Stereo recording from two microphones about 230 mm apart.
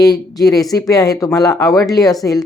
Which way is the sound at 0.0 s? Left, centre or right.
Centre.